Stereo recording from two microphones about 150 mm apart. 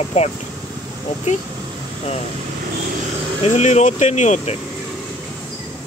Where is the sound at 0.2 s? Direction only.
50° left (ahead or behind).